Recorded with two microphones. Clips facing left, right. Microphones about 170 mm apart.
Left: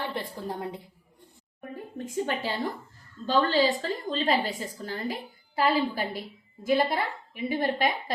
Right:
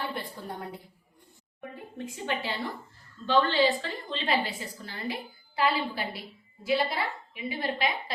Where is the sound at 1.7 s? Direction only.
45° left (ahead or behind).